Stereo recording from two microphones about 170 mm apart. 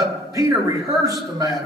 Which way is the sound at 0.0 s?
20° right (ahead or behind).